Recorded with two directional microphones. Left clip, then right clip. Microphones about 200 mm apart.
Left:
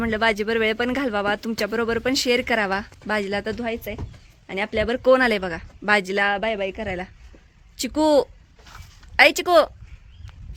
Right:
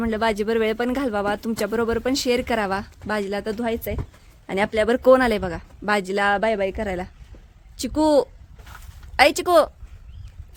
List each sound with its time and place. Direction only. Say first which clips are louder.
0.0 s speech: left 1 dB; 10° right (ahead or behind)
3.5 s a woman's voice: right 2 dB; 20° right (ahead or behind)
6.3 s a woman's voice: right 3 dB; 25° right (ahead or behind)
7.8 s a sound: even; 10° right (ahead or behind)
9.1 s speech: left 1 dB; 10° right (ahead or behind)